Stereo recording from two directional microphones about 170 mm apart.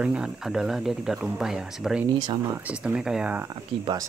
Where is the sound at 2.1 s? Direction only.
25° right (ahead or behind).